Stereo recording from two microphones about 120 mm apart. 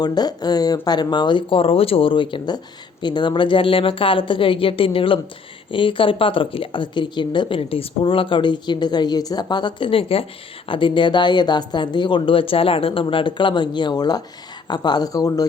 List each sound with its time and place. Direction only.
0.0 s speech: 35° left (ahead or behind)